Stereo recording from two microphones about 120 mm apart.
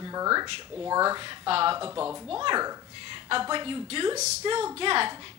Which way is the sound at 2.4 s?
40° right (ahead or behind).